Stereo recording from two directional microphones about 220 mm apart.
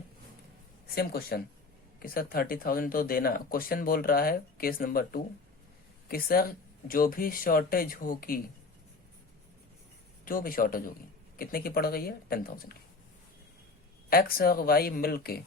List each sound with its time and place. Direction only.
0.9 s speech: 45° left (ahead or behind)
10.2 s speech: 40° left (ahead or behind)
14.1 s speech: 40° left (ahead or behind)